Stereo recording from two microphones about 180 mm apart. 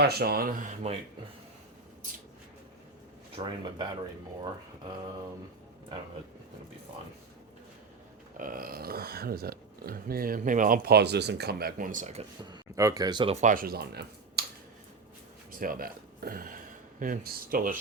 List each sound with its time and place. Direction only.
0.0 s speech: 60° right (ahead or behind); by 0.9 s 40° right (ahead or behind)
3.3 s speech: 25° right (ahead or behind)
8.4 s speech: 50° right (ahead or behind)
12.5 s speech: 20° right (ahead or behind)
13.3 s speech: 45° right (ahead or behind); by 14.4 s 60° right (ahead or behind)
15.5 s speech: 50° right (ahead or behind)